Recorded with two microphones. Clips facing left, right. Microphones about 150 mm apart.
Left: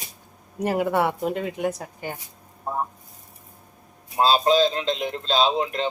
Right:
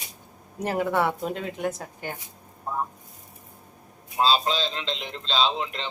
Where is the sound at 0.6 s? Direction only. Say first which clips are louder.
Left 2 dB; 5° left (ahead or behind).